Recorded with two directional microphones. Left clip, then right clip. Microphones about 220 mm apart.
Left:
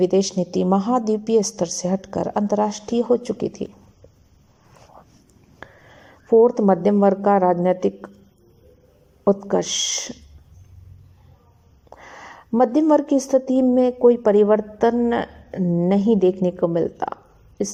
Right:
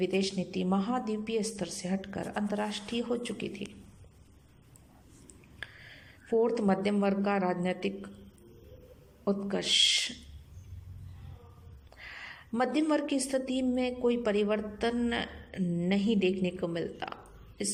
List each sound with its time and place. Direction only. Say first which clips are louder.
0.0 s a woman's voice: left 12 dB; 35° left (ahead or behind)
6.3 s a woman's voice: left 13 dB; 30° left (ahead or behind)
9.5 s a woman's voice: left 4 dB; 30° left (ahead or behind)
11.9 s a woman's voice: left 5 dB; 30° left (ahead or behind)